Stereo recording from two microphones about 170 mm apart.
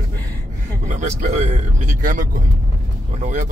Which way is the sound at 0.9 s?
45° right (ahead or behind).